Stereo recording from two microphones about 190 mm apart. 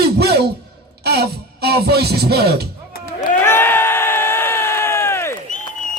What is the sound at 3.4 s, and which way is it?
Crowd, 10° left (ahead or behind).